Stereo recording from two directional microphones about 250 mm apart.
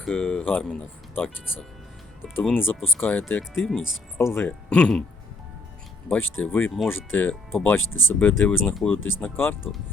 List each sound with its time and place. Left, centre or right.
0.0 s speech: centre
2.3 s speech: centre
6.4 s speech: centre
7.8 s speech: left
8.0 s speech: centre